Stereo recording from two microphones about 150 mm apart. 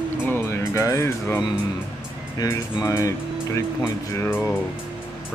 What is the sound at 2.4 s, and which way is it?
Speech, 20° left (ahead or behind).